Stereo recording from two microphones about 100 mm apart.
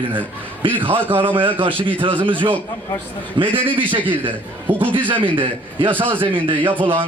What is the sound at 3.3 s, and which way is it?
Speech, 60° right (ahead or behind).